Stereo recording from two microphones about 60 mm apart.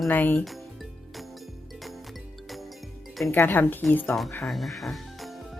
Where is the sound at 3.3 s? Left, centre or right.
Left.